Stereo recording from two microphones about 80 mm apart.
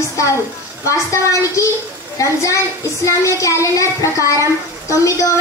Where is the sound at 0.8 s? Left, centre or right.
Left.